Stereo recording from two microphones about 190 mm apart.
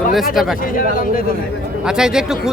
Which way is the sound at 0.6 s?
45° left (ahead or behind).